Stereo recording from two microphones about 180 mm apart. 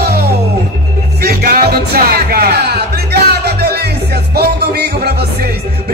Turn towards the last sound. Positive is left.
turn(degrees=-60)  # may be behind; listen again after turning